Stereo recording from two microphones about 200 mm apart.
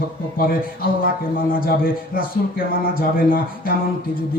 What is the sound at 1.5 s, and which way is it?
Speech, 45° left (ahead or behind).